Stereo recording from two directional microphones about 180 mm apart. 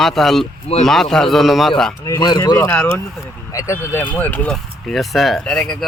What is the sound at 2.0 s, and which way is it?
Speech, 20° left (ahead or behind).